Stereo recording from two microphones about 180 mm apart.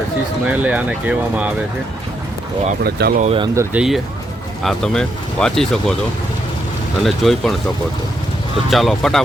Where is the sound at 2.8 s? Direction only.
60° right (ahead or behind).